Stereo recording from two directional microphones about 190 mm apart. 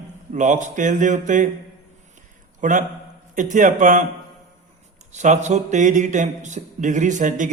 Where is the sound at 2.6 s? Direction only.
45° right (ahead or behind).